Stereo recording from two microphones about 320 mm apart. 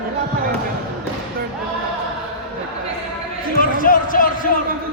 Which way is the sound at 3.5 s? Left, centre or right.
Left.